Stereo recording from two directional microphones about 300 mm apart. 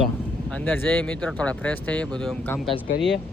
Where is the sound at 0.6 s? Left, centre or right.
Centre.